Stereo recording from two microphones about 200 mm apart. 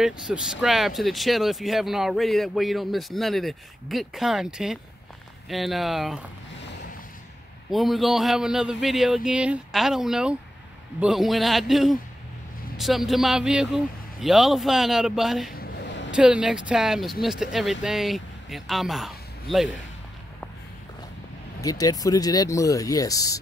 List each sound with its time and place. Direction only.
0.0 s speech: 5° right (ahead or behind)
7.7 s speech: centre (ahead or behind)
15.5 s a sound: 55° left (ahead or behind)
16.2 s speech: 5° right (ahead or behind)
21.5 s speech: 15° left (ahead or behind)